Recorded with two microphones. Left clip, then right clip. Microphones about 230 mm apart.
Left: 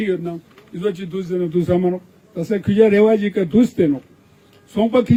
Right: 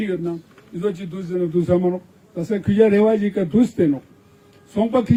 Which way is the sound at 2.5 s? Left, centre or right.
Left.